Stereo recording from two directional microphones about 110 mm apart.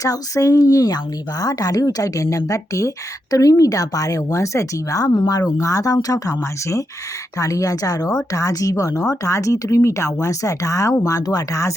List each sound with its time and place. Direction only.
0.0 s speech: 30° left (ahead or behind)